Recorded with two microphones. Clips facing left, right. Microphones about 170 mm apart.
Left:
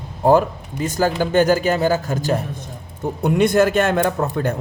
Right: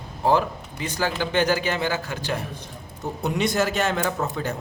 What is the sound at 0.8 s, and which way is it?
A man's voice, 45° left (ahead or behind).